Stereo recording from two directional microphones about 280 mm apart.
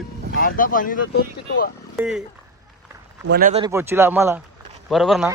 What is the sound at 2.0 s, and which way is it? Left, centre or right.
Speech, centre.